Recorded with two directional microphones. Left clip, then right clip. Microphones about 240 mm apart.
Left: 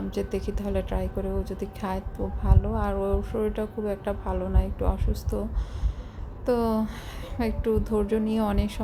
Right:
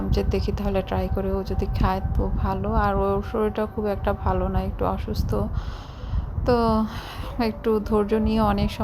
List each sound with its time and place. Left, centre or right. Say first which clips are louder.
0.1 s a woman's voice: right 4 dB; centre